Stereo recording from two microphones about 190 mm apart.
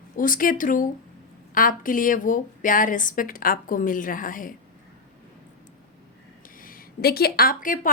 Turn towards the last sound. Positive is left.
turn(degrees=45)  # may be behind; listen again after turning